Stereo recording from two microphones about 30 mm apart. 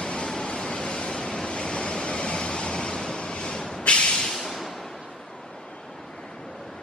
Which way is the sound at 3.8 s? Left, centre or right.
Left.